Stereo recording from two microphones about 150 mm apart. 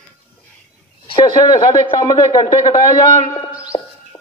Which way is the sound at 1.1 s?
25° left (ahead or behind).